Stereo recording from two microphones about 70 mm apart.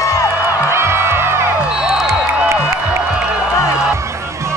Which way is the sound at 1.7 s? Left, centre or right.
Centre.